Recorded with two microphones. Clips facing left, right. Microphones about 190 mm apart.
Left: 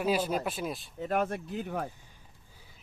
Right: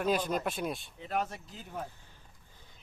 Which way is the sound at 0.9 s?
50° left (ahead or behind).